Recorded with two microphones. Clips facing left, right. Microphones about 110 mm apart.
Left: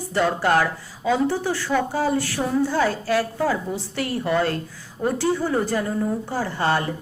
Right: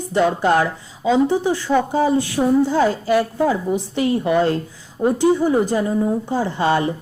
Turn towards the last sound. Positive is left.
turn(degrees=-20)  # may be behind; listen again after turning